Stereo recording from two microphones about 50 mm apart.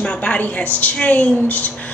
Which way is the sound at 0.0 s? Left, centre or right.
Left.